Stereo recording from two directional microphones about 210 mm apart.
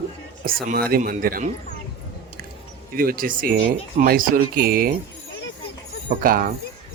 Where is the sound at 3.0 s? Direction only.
40° right (ahead or behind).